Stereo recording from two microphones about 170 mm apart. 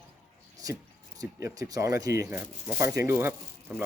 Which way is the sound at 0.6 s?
20° right (ahead or behind).